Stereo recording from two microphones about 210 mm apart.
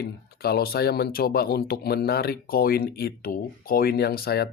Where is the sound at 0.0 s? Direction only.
45° left (ahead or behind).